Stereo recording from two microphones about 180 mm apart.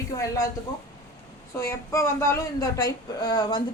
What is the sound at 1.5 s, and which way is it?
Speech, 15° left (ahead or behind).